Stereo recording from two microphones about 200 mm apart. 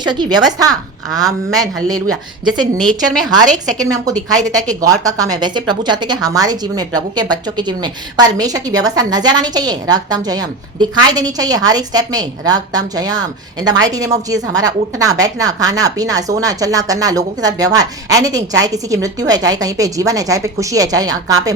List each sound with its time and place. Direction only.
0.0 s a woman's voice: 20° right (ahead or behind)
3.4 s a woman's voice: 40° right (ahead or behind)
3.8 s a woman's voice: 20° right (ahead or behind)